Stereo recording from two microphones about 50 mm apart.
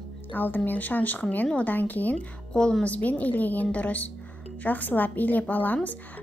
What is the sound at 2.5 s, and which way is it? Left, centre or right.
Speech, centre.